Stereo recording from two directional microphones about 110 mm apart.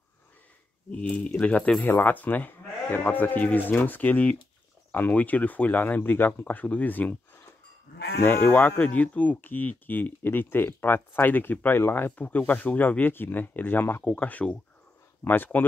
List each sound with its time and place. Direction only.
1.0 s speech: 10° left (ahead or behind)